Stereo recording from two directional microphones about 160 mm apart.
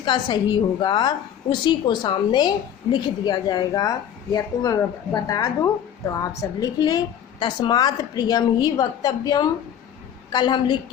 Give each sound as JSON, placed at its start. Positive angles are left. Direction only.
{"t": 0.0, "sound": "a woman's voice", "side_deg": 30}